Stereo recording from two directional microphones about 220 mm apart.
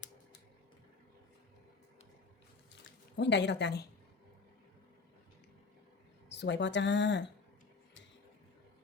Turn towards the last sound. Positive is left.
turn(degrees=55)  # may be behind; listen again after turning